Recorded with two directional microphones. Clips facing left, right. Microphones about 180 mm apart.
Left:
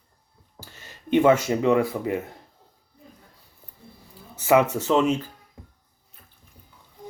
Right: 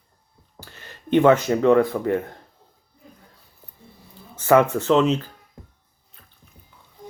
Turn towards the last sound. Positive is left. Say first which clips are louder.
# right 3 dB
turn(degrees=10)  # may be behind; listen again after turning